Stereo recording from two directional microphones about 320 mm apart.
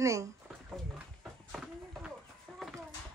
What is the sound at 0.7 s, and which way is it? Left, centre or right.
Horse, centre.